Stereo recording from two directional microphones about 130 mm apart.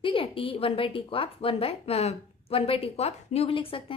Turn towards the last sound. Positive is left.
turn(degrees=45)  # may be behind; listen again after turning